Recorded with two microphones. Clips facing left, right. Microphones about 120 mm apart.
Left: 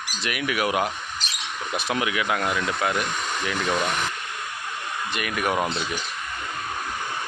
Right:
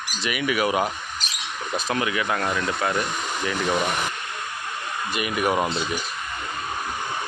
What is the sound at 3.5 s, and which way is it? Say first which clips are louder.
Speech: right 1 dB; 10° right (ahead or behind).